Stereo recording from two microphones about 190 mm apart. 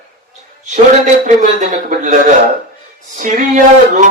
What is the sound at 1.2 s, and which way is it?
Speech, 40° right (ahead or behind).